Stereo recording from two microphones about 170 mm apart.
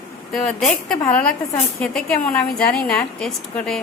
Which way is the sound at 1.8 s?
5° left (ahead or behind).